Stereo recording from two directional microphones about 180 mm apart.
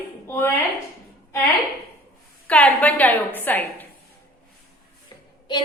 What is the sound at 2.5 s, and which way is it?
A woman's voice, 10° left (ahead or behind).